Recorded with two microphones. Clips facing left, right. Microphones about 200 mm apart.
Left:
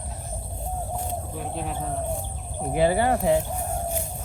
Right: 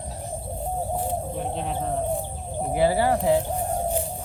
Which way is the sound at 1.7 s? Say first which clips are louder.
Right 5 dB; 15° right (ahead or behind).